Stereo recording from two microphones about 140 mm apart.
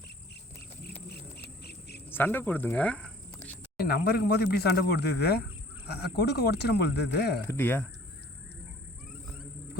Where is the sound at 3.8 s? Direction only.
90° left.